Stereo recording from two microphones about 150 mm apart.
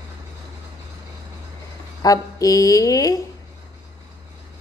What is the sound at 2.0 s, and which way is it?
A woman's voice, 25° left (ahead or behind).